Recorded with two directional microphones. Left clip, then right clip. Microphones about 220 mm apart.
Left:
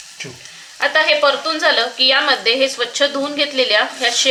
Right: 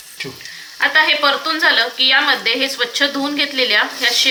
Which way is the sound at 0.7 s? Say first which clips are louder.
Right 1 dB; 50° left (ahead or behind).